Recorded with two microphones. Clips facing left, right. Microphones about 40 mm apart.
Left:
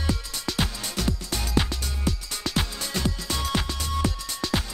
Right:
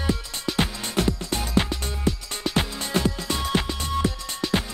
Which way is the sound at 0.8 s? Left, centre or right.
Right.